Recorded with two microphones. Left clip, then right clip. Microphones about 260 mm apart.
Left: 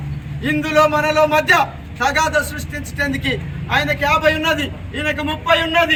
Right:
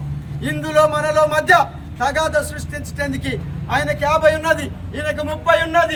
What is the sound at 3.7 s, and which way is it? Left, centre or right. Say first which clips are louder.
A man's voice: left 1 dB; centre.